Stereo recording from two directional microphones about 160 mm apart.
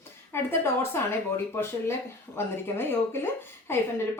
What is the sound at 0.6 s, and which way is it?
A woman's voice, 15° left (ahead or behind).